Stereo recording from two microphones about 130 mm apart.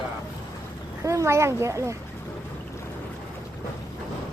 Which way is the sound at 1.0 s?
25° right (ahead or behind).